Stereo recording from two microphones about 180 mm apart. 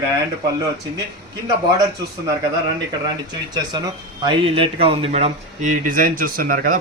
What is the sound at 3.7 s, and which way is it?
Speech, 25° right (ahead or behind).